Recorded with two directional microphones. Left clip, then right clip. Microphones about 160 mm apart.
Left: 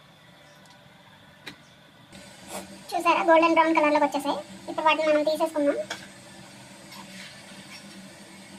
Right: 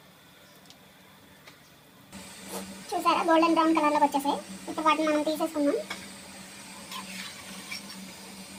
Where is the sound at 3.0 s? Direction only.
30° right (ahead or behind).